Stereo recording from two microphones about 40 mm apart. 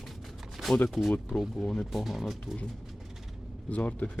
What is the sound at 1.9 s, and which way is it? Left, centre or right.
Speech, centre.